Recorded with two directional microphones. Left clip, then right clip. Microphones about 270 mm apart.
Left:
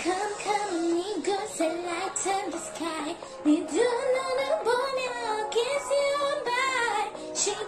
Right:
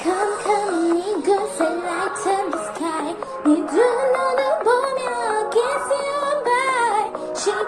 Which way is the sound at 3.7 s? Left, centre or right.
Right.